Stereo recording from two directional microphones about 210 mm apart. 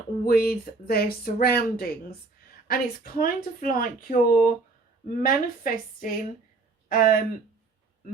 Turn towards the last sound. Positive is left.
turn(degrees=40)  # may be behind; listen again after turning